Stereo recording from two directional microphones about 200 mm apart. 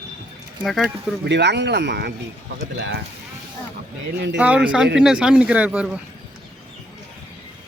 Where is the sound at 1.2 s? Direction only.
60° right (ahead or behind).